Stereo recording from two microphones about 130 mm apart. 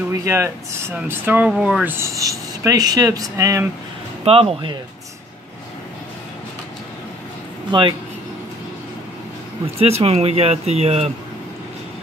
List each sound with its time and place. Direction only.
0.1 s speech: 25° right (ahead or behind); by 2.0 s 5° right (ahead or behind)
2.0 s speech: 25° right (ahead or behind)
4.2 s speech: 45° right (ahead or behind)
9.8 s speech: 50° right (ahead or behind)